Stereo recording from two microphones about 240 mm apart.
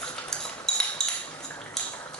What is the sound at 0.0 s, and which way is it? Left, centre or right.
Cutlery, centre.